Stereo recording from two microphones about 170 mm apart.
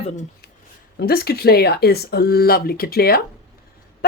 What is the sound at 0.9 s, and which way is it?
A woman's voice, 65° left (ahead or behind).